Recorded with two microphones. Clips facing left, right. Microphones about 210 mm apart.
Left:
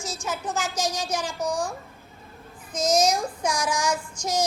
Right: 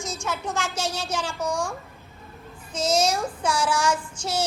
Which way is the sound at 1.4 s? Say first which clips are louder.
Even; 10° right (ahead or behind).